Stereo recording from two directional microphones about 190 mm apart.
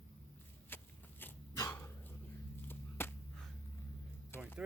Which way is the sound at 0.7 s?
10° left (ahead or behind).